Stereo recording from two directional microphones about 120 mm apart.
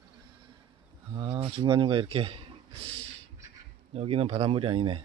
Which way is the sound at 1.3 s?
45° right (ahead or behind).